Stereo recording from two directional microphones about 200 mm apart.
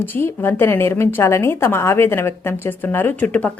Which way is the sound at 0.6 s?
10° left (ahead or behind).